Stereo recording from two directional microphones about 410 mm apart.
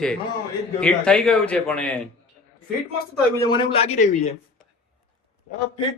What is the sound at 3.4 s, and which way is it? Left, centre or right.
Speech, centre.